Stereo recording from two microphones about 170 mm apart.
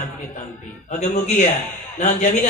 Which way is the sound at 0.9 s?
40° left (ahead or behind).